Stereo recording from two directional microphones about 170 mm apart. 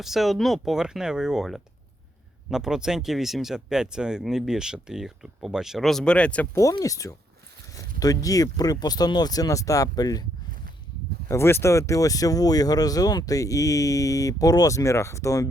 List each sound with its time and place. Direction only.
0.0 s speech: centre (ahead or behind); by 10.2 s 20° left (ahead or behind)
11.3 s speech: 15° left (ahead or behind)